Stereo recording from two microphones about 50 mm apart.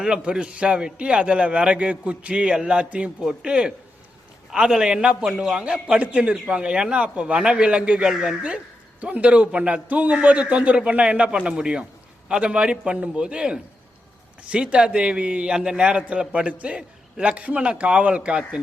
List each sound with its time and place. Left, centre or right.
0.0 s a man's voice: centre